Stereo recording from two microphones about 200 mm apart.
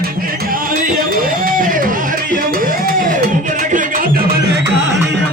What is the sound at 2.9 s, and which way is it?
Music, 45° right (ahead or behind).